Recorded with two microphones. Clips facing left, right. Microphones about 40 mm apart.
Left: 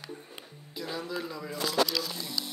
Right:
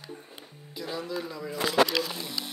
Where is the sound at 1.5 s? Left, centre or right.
Right.